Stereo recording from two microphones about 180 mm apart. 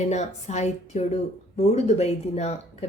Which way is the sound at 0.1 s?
40° left (ahead or behind).